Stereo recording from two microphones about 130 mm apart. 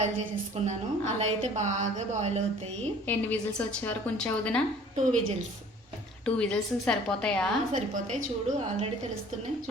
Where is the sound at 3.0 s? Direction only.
10° left (ahead or behind).